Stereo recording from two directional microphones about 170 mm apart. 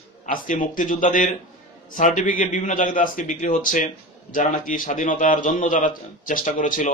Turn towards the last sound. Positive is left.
turn(degrees=50)  # may be behind; listen again after turning